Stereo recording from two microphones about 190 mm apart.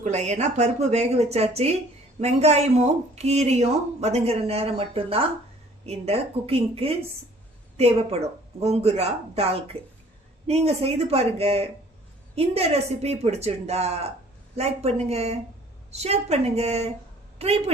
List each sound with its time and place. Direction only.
0.0 s speech: 35° right (ahead or behind)
8.6 s speech: 35° right (ahead or behind)